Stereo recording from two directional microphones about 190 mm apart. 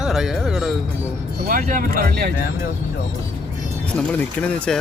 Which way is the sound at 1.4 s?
45° right (ahead or behind).